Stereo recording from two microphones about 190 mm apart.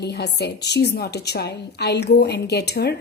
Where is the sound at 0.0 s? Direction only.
60° left (ahead or behind).